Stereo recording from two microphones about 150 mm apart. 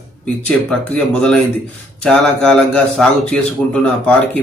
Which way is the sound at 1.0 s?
5° left (ahead or behind).